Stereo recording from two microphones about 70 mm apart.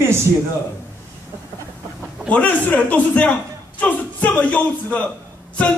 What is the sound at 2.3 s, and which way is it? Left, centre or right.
A man's voice, centre.